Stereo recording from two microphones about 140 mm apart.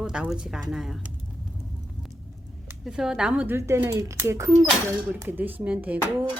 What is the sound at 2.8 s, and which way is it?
Speech, 5° right (ahead or behind).